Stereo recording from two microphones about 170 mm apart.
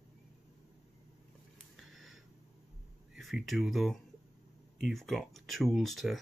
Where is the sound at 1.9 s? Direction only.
Centre (ahead or behind).